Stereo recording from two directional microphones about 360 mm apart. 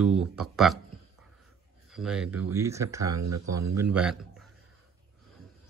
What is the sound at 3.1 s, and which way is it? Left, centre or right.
Speech, right.